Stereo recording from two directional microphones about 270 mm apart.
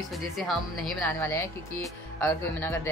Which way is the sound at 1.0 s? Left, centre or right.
Centre.